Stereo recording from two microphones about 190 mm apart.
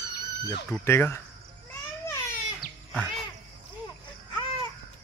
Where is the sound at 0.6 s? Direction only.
10° left (ahead or behind).